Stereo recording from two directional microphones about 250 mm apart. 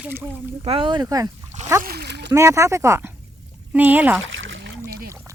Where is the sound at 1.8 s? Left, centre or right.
Right.